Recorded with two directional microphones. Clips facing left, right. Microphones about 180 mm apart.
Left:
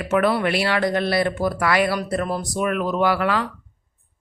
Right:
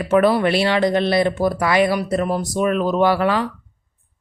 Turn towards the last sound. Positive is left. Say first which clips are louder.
# right 3 dB
turn(degrees=-25)  # may be behind; listen again after turning